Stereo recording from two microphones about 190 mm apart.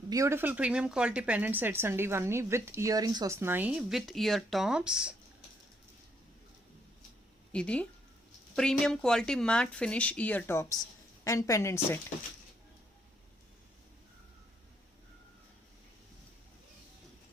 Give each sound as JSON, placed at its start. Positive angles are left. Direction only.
{"t": 0.1, "sound": "speech", "side_deg": -15}
{"t": 7.5, "sound": "a woman's voice", "side_deg": 5}